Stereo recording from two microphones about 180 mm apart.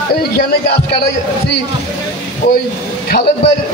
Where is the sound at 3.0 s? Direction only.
55° left (ahead or behind).